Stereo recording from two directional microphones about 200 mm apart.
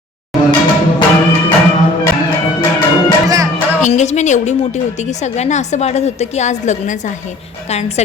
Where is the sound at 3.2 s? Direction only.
15° right (ahead or behind).